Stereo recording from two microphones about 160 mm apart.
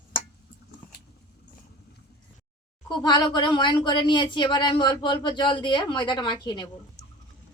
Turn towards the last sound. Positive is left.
turn(degrees=30)  # may be behind; listen again after turning